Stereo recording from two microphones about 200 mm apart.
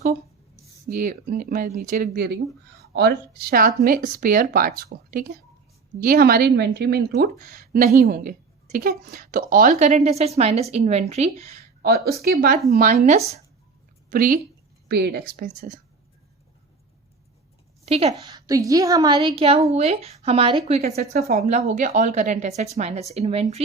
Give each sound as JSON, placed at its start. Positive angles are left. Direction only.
{"t": 0.9, "sound": "a woman's voice", "side_deg": -40}
{"t": 11.8, "sound": "a woman's voice", "side_deg": -50}
{"t": 14.1, "sound": "a woman's voice", "side_deg": -45}
{"t": 17.8, "sound": "a woman's voice", "side_deg": -30}
{"t": 18.1, "sound": "a woman's voice", "side_deg": -20}
{"t": 21.1, "sound": "a woman's voice", "side_deg": -45}